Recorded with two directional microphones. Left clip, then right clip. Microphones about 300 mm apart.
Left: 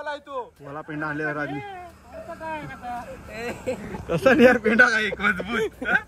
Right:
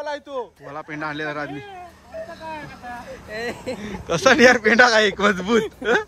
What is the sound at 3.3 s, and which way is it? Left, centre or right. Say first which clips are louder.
Speech: right 2 dB; right.